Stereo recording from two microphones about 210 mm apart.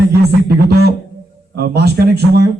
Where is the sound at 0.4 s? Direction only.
50° right (ahead or behind).